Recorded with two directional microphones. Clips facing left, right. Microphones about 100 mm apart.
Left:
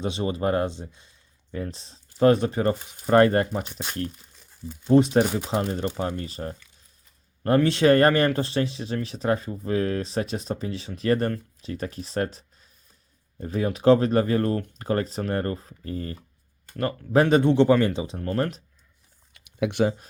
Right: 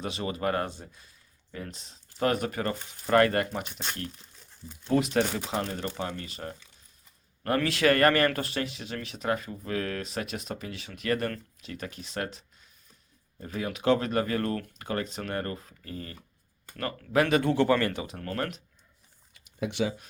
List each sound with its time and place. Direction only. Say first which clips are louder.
0.0 s speech: left 5 dB; 30° left (ahead or behind)
1.5 s speech: left 7 dB; 35° left (ahead or behind)
4.9 s speech: left 7 dB; 35° left (ahead or behind)
5.2 s speech: left 5 dB; 10° left (ahead or behind)
5.5 s speech: left 5 dB; 30° left (ahead or behind)
19.3 s a sound: left 6 dB; 70° left (ahead or behind)
19.7 s speech: left 6 dB; 50° left (ahead or behind)